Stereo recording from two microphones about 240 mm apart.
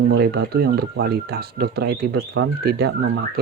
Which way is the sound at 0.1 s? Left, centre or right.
Right.